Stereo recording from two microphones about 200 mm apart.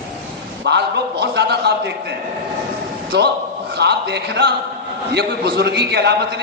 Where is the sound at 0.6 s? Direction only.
60° right (ahead or behind).